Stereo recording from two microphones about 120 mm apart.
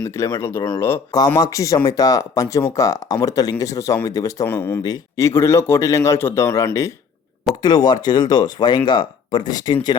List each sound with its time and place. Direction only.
0.2 s a man's voice: 25° left (ahead or behind)
4.8 s a man's voice: 30° left (ahead or behind)